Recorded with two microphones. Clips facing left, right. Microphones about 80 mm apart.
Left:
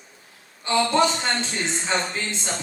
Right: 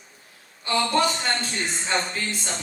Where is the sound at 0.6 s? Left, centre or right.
Left.